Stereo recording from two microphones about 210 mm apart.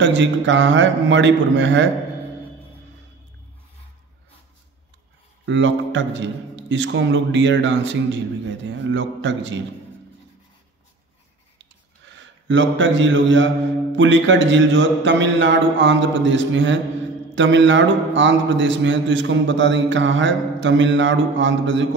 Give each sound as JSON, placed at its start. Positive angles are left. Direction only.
{"t": 0.0, "sound": "a man's voice", "side_deg": -60}
{"t": 5.4, "sound": "a man's voice", "side_deg": -65}
{"t": 11.5, "sound": "a sound", "side_deg": -60}
{"t": 13.9, "sound": "a man's voice", "side_deg": -60}